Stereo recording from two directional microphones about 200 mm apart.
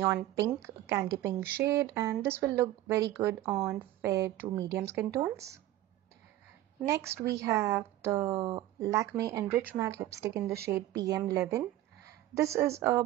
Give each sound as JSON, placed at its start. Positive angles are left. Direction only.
{"t": 0.0, "sound": "speech", "side_deg": -15}
{"t": 6.9, "sound": "speech", "side_deg": -15}